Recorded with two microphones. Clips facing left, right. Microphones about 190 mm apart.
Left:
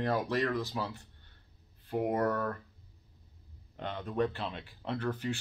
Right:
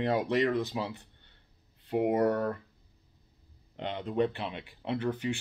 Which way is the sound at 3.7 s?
20° right (ahead or behind).